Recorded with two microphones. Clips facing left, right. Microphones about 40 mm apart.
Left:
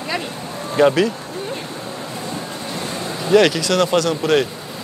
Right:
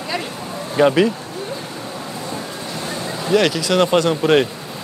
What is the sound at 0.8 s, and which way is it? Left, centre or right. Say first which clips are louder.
Speech: even; centre.